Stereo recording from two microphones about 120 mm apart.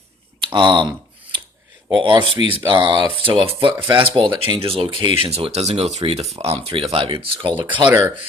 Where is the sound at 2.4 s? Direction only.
50° left (ahead or behind).